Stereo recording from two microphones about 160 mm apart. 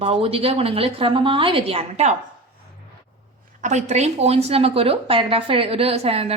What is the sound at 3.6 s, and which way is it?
A woman's voice, 45° right (ahead or behind).